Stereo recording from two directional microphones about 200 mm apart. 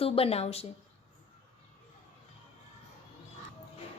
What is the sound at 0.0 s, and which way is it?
Speech, 30° left (ahead or behind).